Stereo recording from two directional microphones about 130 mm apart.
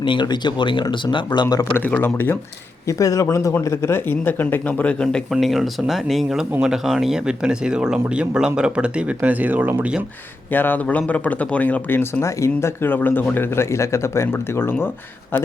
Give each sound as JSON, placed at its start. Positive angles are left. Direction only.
{"t": 0.0, "sound": "speech", "side_deg": 40}
{"t": 1.7, "sound": "speech", "side_deg": 15}
{"t": 10.5, "sound": "speech", "side_deg": 15}